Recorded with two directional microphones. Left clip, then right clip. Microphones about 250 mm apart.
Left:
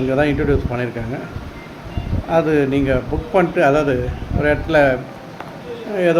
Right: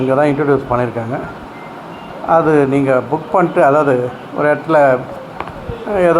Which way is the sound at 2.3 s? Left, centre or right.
Right.